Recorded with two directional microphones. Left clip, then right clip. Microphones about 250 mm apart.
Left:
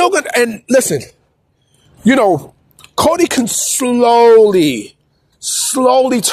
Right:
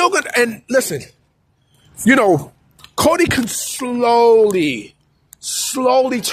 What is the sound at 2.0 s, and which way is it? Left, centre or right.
Speech, centre.